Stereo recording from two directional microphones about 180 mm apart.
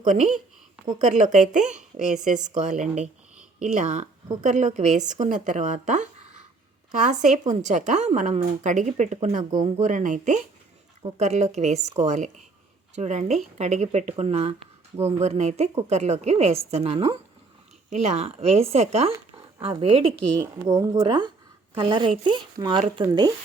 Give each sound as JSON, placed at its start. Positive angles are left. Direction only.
{"t": 0.0, "sound": "a woman's voice", "side_deg": -45}
{"t": 20.4, "sound": "speech", "side_deg": -20}